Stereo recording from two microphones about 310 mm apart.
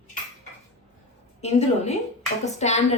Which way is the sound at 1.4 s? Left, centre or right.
Left.